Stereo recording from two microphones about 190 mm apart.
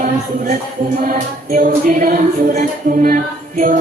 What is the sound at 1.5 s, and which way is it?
Music, 45° right (ahead or behind).